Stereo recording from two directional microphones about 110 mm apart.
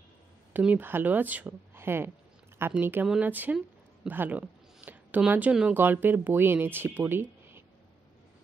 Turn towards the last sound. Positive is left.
turn(degrees=-20)  # may be behind; listen again after turning